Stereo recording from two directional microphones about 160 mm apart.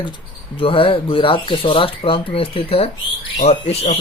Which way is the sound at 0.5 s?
35° left (ahead or behind).